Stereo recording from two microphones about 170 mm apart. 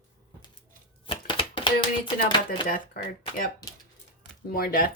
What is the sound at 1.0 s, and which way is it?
Chopping, 30° left (ahead or behind).